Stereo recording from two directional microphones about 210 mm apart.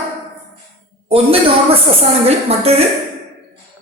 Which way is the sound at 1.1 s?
25° right (ahead or behind).